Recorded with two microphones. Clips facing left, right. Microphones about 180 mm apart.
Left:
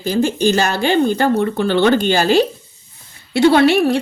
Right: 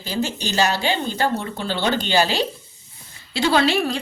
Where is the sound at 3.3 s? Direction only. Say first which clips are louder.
Left 7 dB; 60° left (ahead or behind).